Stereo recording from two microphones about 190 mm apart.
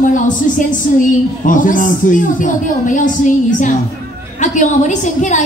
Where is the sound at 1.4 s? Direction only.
45° left (ahead or behind).